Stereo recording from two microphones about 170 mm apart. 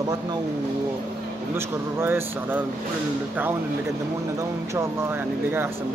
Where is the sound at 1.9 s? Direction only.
15° right (ahead or behind).